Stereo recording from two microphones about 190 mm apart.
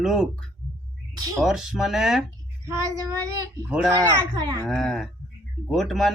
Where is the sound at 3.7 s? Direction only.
5° right (ahead or behind).